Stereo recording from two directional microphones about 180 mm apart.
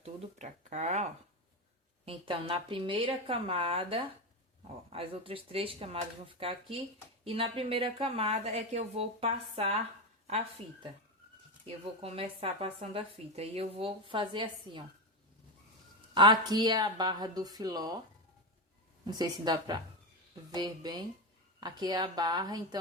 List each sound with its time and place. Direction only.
0.0 s speech: 40° right (ahead or behind)
2.0 s a woman's voice: 30° right (ahead or behind)
12.0 s a woman's voice: 35° right (ahead or behind)
16.1 s a woman's voice: 25° right (ahead or behind)
19.0 s a woman's voice: 25° right (ahead or behind)